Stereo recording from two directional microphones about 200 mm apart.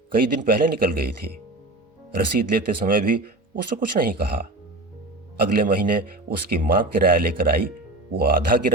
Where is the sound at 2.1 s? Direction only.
45° right (ahead or behind).